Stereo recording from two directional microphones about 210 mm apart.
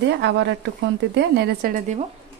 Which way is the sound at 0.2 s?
55° right (ahead or behind).